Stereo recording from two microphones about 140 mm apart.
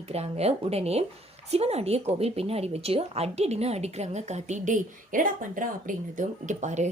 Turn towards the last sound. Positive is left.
turn(degrees=-60)  # may be behind; listen again after turning